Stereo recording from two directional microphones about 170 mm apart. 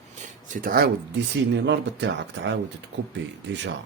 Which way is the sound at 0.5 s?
55° right (ahead or behind).